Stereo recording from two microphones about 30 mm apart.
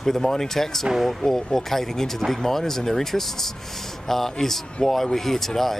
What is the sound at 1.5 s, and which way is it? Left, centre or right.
Speech, centre.